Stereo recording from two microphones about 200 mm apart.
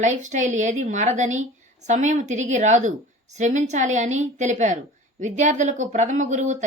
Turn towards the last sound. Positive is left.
turn(degrees=-35)  # may be behind; listen again after turning